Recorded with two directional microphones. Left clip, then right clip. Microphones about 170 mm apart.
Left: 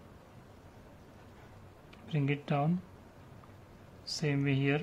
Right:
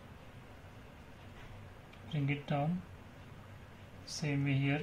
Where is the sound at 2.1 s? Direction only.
45° left (ahead or behind).